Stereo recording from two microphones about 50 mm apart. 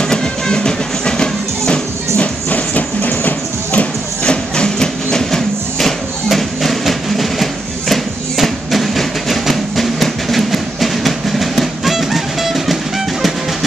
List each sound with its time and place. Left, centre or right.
0.0 s music: centre
2.5 s music: left
4.2 s a sound: centre
7.9 s music: centre